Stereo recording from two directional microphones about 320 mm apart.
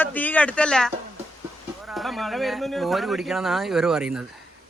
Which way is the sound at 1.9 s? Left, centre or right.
Centre.